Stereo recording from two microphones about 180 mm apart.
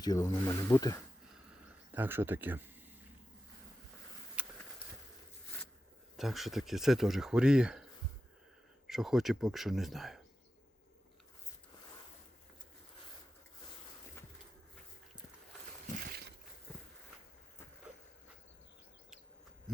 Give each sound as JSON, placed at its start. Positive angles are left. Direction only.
{"t": 0.0, "sound": "speech", "side_deg": 20}
{"t": 1.9, "sound": "speech", "side_deg": -10}
{"t": 4.4, "sound": "a sound", "side_deg": -5}
{"t": 6.1, "sound": "speech", "side_deg": 0}
{"t": 8.9, "sound": "speech", "side_deg": 0}